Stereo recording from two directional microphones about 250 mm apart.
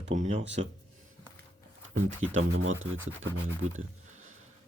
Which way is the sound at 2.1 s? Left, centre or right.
Right.